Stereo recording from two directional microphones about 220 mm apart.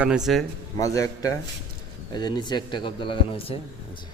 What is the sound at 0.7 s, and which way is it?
A man's voice, 15° left (ahead or behind).